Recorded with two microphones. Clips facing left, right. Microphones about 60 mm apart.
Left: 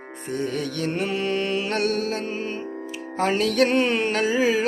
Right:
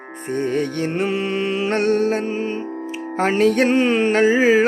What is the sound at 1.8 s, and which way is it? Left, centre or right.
Music, right.